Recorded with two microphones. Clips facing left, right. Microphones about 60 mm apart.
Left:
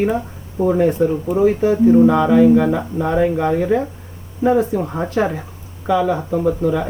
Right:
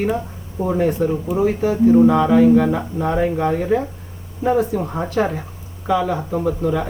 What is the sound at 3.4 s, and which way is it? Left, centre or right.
Speech, centre.